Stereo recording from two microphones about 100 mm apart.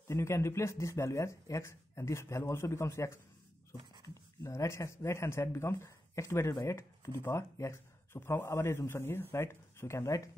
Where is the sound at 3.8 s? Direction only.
50° right (ahead or behind).